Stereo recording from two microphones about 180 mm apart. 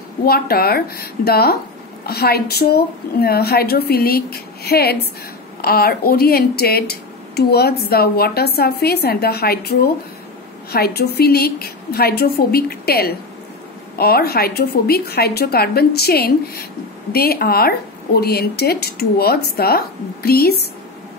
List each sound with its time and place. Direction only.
0.2 s speech: 60° left (ahead or behind)